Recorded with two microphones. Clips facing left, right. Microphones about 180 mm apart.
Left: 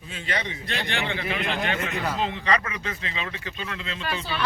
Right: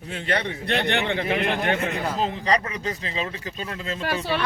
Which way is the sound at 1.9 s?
35° right (ahead or behind).